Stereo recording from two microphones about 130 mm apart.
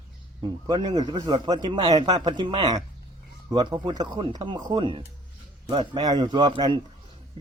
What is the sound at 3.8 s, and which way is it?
Speech, 35° right (ahead or behind).